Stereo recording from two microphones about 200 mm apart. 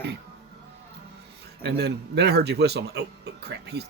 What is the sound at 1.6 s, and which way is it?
Speech, 55° right (ahead or behind).